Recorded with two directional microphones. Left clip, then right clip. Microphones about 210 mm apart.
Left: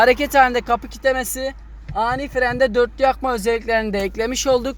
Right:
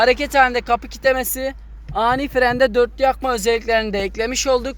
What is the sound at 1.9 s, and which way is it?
Speech, 20° right (ahead or behind).